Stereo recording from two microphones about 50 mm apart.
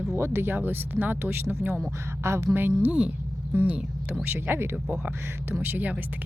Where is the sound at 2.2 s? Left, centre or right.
Right.